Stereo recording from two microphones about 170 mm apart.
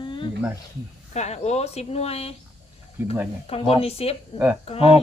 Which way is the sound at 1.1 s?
40° left (ahead or behind).